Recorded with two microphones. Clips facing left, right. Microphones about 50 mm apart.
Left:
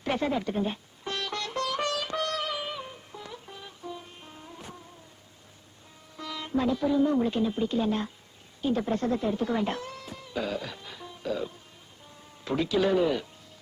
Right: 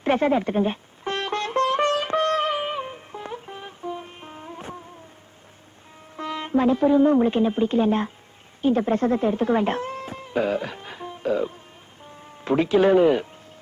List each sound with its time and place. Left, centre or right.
0.0 s music: right
6.1 s a woman's voice: right